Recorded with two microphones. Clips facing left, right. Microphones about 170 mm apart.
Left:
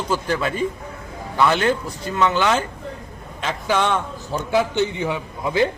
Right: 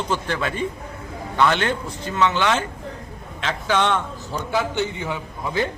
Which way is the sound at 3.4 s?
10° left (ahead or behind).